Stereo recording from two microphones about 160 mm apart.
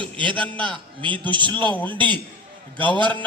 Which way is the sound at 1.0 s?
30° right (ahead or behind).